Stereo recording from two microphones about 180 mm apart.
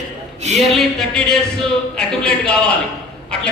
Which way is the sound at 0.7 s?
Centre (ahead or behind).